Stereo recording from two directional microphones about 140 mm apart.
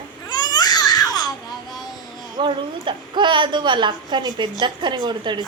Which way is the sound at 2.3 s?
35° right (ahead or behind).